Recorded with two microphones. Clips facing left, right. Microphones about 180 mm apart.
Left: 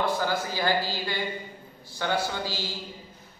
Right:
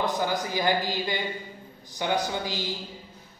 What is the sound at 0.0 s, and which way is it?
A man's voice, 15° right (ahead or behind).